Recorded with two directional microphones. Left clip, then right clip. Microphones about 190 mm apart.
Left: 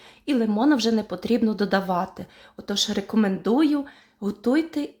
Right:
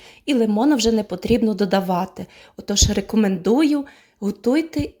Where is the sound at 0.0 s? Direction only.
15° right (ahead or behind).